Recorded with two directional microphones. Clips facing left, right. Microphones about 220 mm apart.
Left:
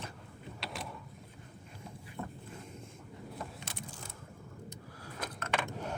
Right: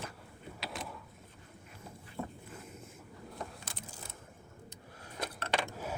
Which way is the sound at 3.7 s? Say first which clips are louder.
Left 3 dB; 25° left (ahead or behind).